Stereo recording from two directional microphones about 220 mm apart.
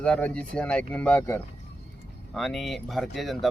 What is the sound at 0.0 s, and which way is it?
Speech, 5° left (ahead or behind).